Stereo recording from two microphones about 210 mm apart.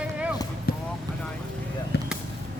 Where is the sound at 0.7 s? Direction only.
45° left (ahead or behind).